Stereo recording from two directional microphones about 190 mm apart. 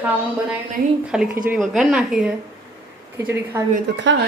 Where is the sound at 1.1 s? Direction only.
5° right (ahead or behind).